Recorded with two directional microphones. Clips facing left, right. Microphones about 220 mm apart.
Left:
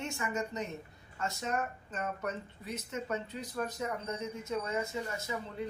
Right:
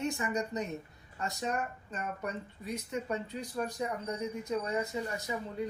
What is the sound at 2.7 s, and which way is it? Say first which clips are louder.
Speech: right 2 dB; 15° right (ahead or behind).